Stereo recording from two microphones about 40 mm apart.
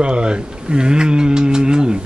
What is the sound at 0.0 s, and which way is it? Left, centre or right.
Speech, right.